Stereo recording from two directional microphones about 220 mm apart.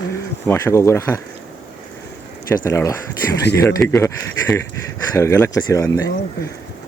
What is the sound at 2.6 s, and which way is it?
Speech, 15° left (ahead or behind).